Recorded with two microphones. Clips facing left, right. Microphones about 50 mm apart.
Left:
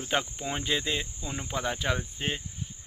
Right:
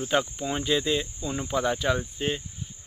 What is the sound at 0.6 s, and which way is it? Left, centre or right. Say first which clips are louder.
Speech: right 5 dB; left.